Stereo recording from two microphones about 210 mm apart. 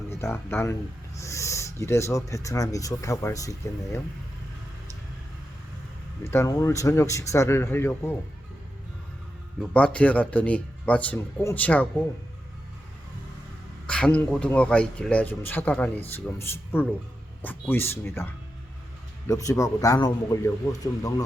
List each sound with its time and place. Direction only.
0.2 s speech: 10° left (ahead or behind)
6.2 s speech: 15° left (ahead or behind)
9.6 s speech: 5° left (ahead or behind)
13.8 s speech: 5° left (ahead or behind)
19.3 s speech: 15° left (ahead or behind)